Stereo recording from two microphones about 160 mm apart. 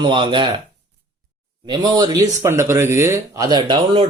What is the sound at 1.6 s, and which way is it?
Speech, 25° right (ahead or behind).